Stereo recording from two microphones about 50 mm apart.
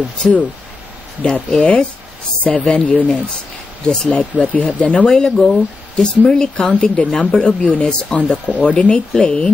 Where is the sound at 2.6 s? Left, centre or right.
Centre.